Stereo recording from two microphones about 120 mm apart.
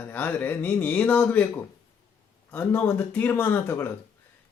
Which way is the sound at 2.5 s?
15° left (ahead or behind).